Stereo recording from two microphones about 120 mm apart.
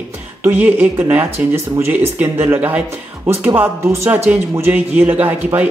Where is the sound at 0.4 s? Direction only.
15° right (ahead or behind).